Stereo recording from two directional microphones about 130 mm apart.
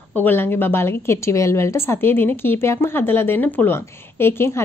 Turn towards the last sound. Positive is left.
turn(degrees=20)  # may be behind; listen again after turning